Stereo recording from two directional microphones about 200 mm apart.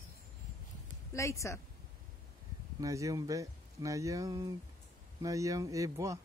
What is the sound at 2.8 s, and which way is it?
Speech, 15° right (ahead or behind).